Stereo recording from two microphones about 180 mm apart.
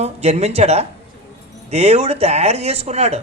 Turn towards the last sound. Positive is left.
turn(degrees=-35)  # may be behind; listen again after turning